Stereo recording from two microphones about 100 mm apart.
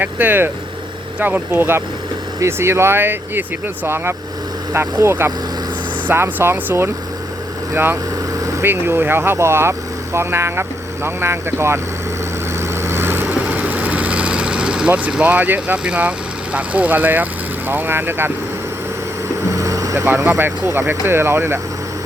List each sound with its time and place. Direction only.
0.0 s speech: 20° right (ahead or behind)
12.8 s vehicle: 25° right (ahead or behind)
17.7 s speech: 20° right (ahead or behind)
19.5 s vehicle: 35° right (ahead or behind)
20.1 s speech: 20° right (ahead or behind)